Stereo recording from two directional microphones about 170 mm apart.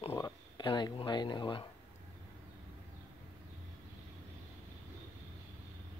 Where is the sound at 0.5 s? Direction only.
25° left (ahead or behind).